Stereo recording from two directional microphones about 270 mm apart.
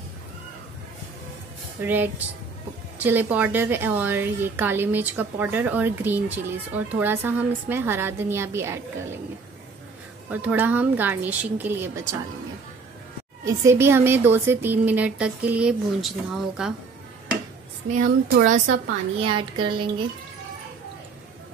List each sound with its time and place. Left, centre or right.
1.8 s a woman's voice: centre
10.3 s a woman's voice: centre
13.5 s a woman's voice: centre
18.7 s a woman's voice: right
19.3 s a woman's voice: centre